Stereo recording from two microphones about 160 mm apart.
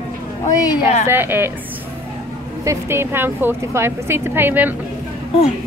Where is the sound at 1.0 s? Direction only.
15° right (ahead or behind).